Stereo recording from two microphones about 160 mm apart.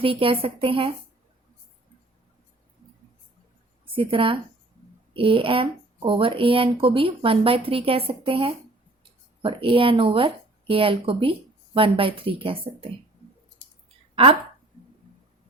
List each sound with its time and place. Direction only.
0.0 s speech: 35° right (ahead or behind)
3.9 s speech: 35° right (ahead or behind)